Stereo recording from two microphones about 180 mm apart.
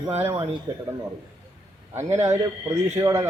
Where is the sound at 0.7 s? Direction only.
30° right (ahead or behind).